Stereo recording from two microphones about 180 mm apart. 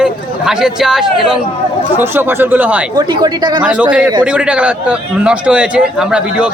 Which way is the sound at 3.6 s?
5° right (ahead or behind).